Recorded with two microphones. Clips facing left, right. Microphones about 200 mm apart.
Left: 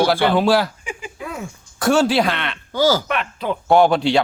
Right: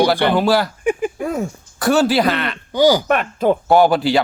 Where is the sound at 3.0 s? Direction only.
45° right (ahead or behind).